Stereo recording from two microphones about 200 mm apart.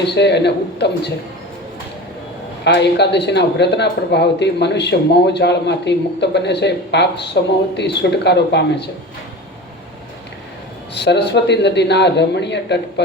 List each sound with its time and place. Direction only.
0.0 s speech: 55° left (ahead or behind)
2.6 s speech: 60° left (ahead or behind)
10.9 s speech: 55° left (ahead or behind)